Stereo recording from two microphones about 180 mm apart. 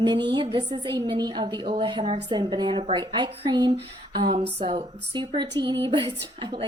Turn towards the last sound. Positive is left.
turn(degrees=-25)  # may be behind; listen again after turning